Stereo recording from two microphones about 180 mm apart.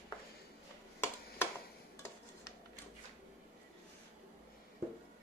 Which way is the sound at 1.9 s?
15° left (ahead or behind).